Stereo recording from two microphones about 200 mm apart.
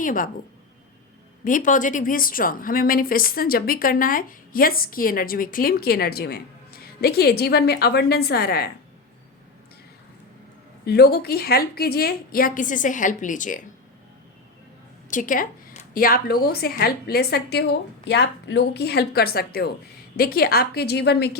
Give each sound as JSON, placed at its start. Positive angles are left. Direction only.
{"t": 0.0, "sound": "speech", "side_deg": 40}
{"t": 1.5, "sound": "a woman's voice", "side_deg": 40}
{"t": 10.8, "sound": "a woman's voice", "side_deg": 50}
{"t": 15.1, "sound": "a woman's voice", "side_deg": 40}